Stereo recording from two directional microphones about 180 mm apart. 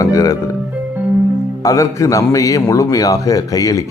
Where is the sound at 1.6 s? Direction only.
20° left (ahead or behind).